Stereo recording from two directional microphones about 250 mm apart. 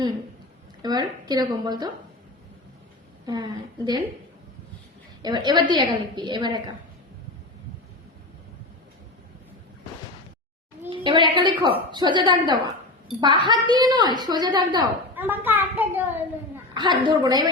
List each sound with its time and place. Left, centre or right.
0.8 s a woman's voice: centre
3.2 s a woman's voice: centre
5.2 s a woman's voice: centre
10.8 s a woman's voice: centre